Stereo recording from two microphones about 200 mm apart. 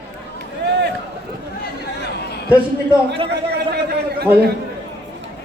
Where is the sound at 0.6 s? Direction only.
55° right (ahead or behind).